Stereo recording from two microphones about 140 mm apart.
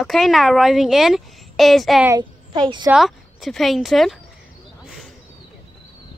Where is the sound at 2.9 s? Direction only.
Centre (ahead or behind).